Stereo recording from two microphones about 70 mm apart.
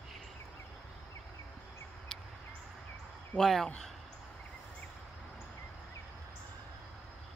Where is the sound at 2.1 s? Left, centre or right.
Centre.